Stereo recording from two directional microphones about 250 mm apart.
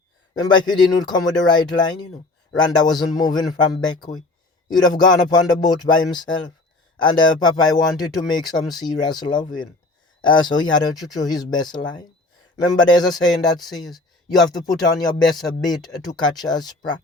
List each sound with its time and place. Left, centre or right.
0.3 s speech: centre
13.9 s speech: centre
14.7 s speech: centre